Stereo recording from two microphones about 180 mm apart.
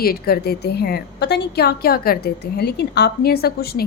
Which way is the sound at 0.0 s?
55° left (ahead or behind).